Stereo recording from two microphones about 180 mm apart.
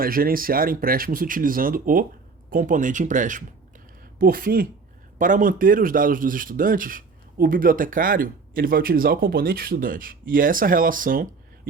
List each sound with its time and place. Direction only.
0.0 s speech: 55° right (ahead or behind)